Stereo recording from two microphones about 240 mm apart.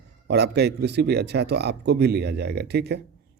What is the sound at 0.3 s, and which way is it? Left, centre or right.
Speech, right.